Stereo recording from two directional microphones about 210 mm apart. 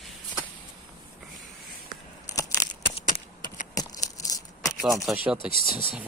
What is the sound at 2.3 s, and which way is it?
Scissors, 15° left (ahead or behind).